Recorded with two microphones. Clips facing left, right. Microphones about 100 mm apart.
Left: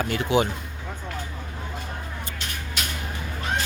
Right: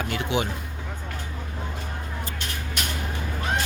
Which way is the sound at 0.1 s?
40° left (ahead or behind).